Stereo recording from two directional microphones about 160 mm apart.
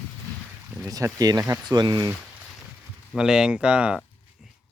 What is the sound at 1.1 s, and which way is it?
Speech, 25° right (ahead or behind).